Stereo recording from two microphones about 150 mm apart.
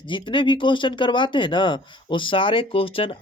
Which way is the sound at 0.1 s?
35° left (ahead or behind).